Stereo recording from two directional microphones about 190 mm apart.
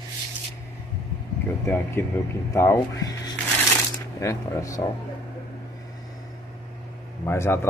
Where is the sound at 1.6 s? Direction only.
10° left (ahead or behind).